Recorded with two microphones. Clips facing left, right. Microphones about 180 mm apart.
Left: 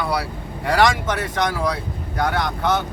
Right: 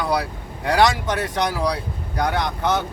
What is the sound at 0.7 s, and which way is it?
Speech, 15° right (ahead or behind).